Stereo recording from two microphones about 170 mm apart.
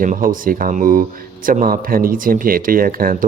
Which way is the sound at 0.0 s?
50° right (ahead or behind).